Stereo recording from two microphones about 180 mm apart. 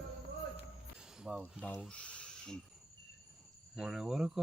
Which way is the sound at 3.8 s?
5° right (ahead or behind).